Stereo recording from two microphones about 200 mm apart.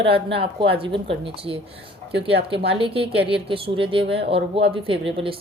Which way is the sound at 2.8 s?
25° right (ahead or behind).